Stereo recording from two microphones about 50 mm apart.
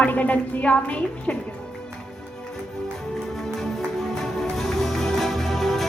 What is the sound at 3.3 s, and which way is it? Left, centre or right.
Music, centre.